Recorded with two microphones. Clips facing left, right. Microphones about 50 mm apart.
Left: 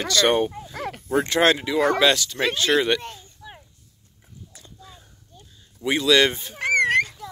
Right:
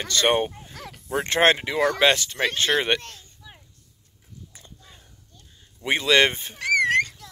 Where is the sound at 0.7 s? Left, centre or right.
Left.